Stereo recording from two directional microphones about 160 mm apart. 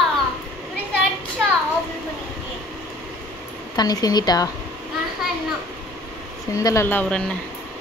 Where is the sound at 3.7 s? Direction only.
25° left (ahead or behind).